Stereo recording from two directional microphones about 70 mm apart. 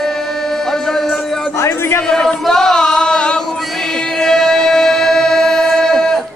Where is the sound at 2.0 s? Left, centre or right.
Centre.